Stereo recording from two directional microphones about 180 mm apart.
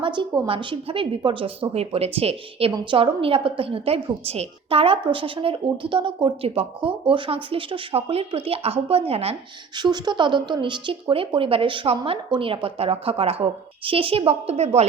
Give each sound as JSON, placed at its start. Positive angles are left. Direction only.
{"t": 0.0, "sound": "a woman's voice", "side_deg": -25}